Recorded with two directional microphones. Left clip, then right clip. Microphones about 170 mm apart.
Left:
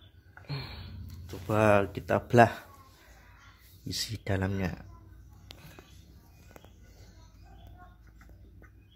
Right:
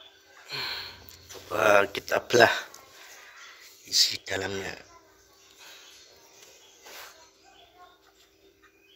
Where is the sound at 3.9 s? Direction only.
15° left (ahead or behind).